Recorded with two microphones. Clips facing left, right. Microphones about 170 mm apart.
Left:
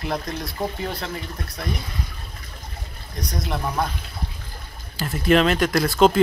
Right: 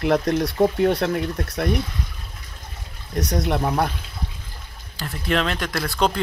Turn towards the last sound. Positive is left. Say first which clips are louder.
# left 6 dB
turn(degrees=5)  # may be behind; listen again after turning